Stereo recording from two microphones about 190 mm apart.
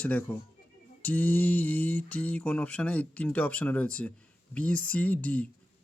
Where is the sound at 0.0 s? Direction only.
10° left (ahead or behind).